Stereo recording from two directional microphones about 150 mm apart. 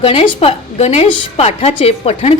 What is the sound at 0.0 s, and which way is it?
A woman's voice, 35° left (ahead or behind).